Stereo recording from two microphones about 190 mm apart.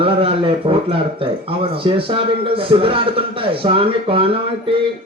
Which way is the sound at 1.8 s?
30° right (ahead or behind).